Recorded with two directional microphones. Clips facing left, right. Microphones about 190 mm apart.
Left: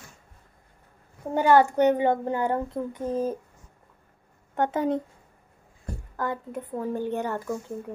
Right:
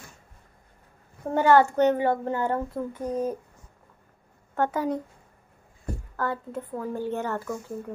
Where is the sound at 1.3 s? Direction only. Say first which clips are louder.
Even; 15° left (ahead or behind).